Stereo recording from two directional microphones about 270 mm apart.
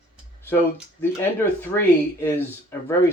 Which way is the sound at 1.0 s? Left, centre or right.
Centre.